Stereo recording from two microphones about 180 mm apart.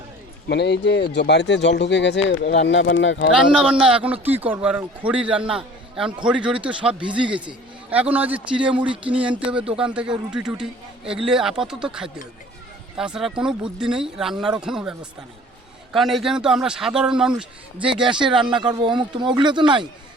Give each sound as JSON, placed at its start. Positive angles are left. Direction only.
{"t": 0.4, "sound": "speech", "side_deg": 70}
{"t": 3.3, "sound": "a man's voice", "side_deg": -5}
{"t": 9.6, "sound": "speech", "side_deg": -30}
{"t": 9.8, "sound": "a man's voice", "side_deg": -5}
{"t": 18.1, "sound": "speech", "side_deg": -25}